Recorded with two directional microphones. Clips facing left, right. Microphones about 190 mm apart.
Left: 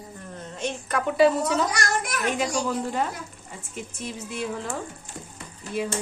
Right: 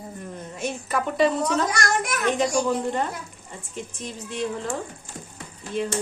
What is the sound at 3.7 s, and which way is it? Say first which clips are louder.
A woman's voice: even; 5° left (ahead or behind).